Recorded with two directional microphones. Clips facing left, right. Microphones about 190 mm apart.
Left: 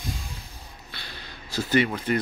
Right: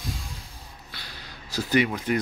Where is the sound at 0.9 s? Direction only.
10° right (ahead or behind).